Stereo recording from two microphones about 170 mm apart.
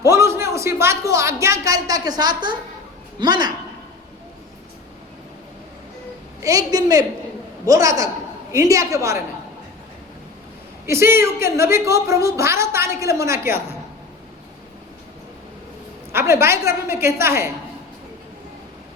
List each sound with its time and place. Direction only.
0.0 s a woman's voice: 15° right (ahead or behind)
6.4 s a woman's voice: 20° right (ahead or behind)
10.8 s a woman's voice: 15° right (ahead or behind)
16.1 s a woman's voice: 15° right (ahead or behind)